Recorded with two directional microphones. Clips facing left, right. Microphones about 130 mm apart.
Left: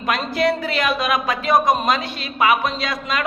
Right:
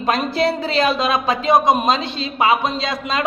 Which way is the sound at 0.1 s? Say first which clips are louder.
Right 1 dB; 30° right (ahead or behind).